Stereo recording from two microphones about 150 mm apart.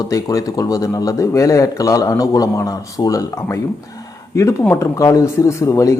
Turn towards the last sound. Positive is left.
turn(degrees=20)  # may be behind; listen again after turning